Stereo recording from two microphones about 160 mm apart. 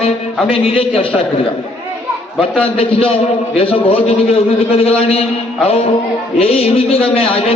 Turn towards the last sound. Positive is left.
turn(degrees=35)  # may be behind; listen again after turning